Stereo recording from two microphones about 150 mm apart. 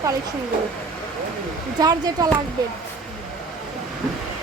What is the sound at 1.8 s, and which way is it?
Speech, 25° right (ahead or behind).